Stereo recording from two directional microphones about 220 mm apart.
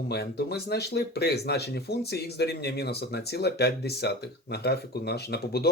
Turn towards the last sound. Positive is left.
turn(degrees=45)  # may be behind; listen again after turning